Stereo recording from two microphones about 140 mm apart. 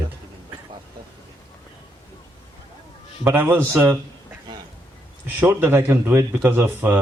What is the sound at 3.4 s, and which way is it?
Speech, 15° right (ahead or behind).